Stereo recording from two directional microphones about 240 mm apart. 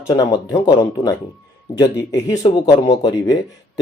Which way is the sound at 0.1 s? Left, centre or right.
Centre.